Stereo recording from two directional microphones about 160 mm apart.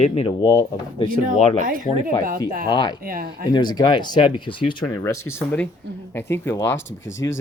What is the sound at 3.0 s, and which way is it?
Speech, 65° right (ahead or behind).